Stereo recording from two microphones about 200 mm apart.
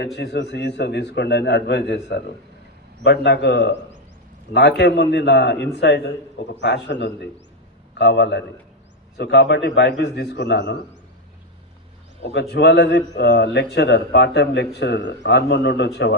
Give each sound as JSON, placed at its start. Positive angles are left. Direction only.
{"t": 0.0, "sound": "a man's voice", "side_deg": 60}
{"t": 12.2, "sound": "a man's voice", "side_deg": 60}